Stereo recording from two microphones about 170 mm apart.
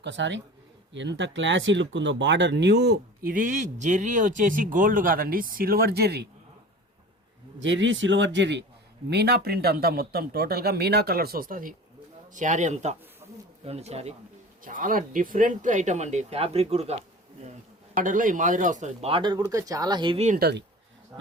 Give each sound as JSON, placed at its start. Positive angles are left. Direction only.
{"t": 0.0, "sound": "speech", "side_deg": -90}
{"t": 7.6, "sound": "speech", "side_deg": -90}
{"t": 9.0, "sound": "speech", "side_deg": -75}
{"t": 14.6, "sound": "speech", "side_deg": -55}
{"t": 17.9, "sound": "speech", "side_deg": -50}
{"t": 20.4, "sound": "speech", "side_deg": -80}